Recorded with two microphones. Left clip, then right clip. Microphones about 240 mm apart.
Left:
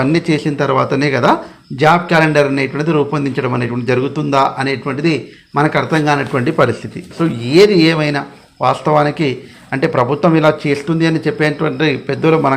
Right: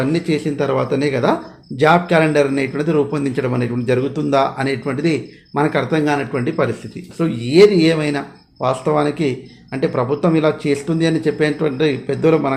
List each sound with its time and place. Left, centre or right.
0.0 s a man's voice: centre